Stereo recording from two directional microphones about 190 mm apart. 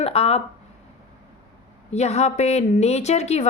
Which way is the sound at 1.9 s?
35° left (ahead or behind).